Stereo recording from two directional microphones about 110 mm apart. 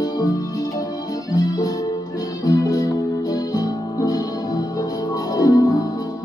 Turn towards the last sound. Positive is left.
turn(degrees=35)  # may be behind; listen again after turning